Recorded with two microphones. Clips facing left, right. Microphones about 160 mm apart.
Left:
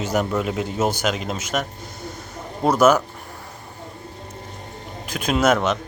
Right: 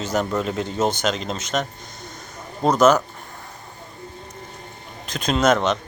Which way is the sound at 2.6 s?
10° left (ahead or behind).